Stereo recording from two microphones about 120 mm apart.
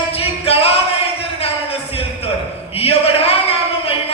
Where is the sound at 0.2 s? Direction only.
55° left (ahead or behind).